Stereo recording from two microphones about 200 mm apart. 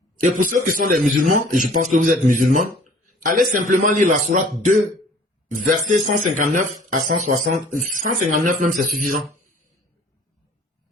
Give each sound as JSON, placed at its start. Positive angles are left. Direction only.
{"t": 0.5, "sound": "a man's voice", "side_deg": -40}
{"t": 5.9, "sound": "a man's voice", "side_deg": -40}